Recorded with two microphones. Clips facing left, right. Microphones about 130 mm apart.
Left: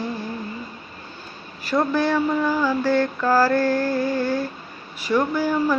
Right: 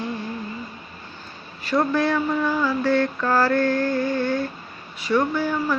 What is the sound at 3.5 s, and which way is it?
Music, 35° left (ahead or behind).